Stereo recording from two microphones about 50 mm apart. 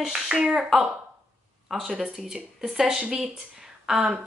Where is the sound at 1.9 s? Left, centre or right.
Centre.